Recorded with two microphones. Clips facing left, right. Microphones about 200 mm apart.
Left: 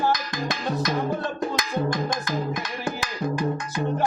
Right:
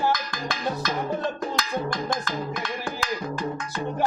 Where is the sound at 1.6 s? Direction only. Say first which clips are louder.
Left 2 dB; 20° left (ahead or behind).